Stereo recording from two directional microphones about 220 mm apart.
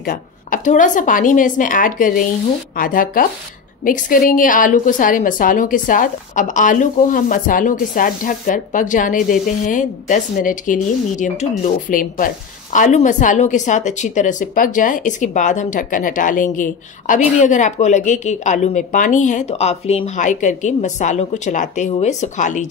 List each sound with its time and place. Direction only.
0.0 s a woman's voice: 40° left (ahead or behind)